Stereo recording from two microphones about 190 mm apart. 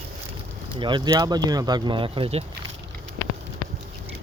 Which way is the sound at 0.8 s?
25° right (ahead or behind).